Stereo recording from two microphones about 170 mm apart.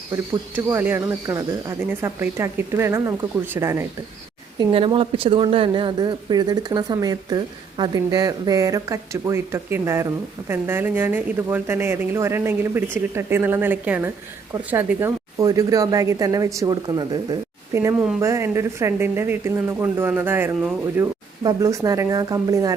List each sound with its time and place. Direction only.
0.5 s speech: 10° right (ahead or behind)
4.7 s speech: 30° right (ahead or behind)
18.2 s speech: 15° right (ahead or behind)